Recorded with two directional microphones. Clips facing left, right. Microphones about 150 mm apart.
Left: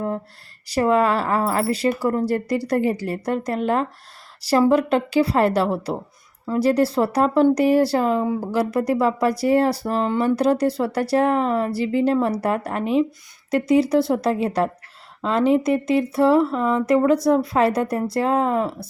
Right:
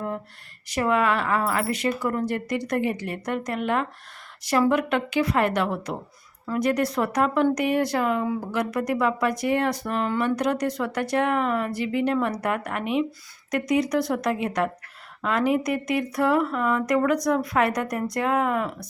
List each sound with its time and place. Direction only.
0.7 s speech: 35° left (ahead or behind)